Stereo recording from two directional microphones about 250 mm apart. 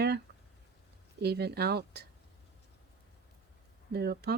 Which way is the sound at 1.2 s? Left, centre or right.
Right.